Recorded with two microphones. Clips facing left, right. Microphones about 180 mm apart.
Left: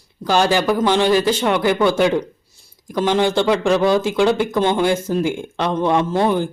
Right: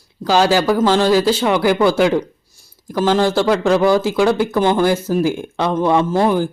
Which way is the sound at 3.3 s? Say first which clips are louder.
Right 2 dB; 5° right (ahead or behind).